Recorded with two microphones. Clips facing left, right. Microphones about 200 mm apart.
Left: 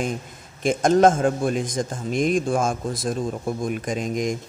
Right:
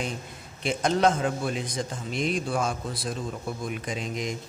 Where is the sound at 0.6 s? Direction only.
45° left (ahead or behind).